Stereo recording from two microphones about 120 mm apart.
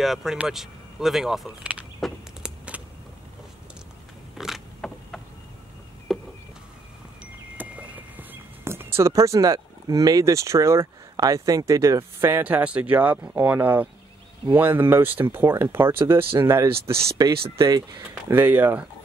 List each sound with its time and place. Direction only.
0.0 s speech: 5° right (ahead or behind)
2.0 s a sound: centre (ahead or behind)
2.7 s vehicle: 10° right (ahead or behind)
4.4 s vehicle: 5° right (ahead or behind)
4.8 s insect: 5° left (ahead or behind)
6.1 s a sound: centre (ahead or behind)
7.5 s speech: 15° right (ahead or behind)
17.2 s speech: 35° right (ahead or behind)
18.0 s speech: 15° right (ahead or behind)